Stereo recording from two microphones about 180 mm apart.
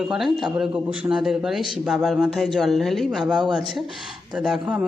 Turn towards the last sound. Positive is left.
turn(degrees=-5)  # may be behind; listen again after turning